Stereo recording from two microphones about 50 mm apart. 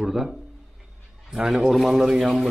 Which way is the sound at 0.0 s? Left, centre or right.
Centre.